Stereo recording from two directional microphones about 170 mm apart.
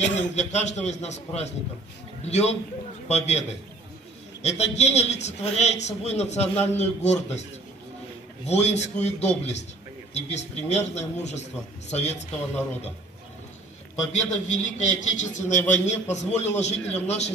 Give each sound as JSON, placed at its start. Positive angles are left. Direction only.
{"t": 0.0, "sound": "a man's voice", "side_deg": 40}
{"t": 8.5, "sound": "a man's voice", "side_deg": 40}
{"t": 14.1, "sound": "a man's voice", "side_deg": 45}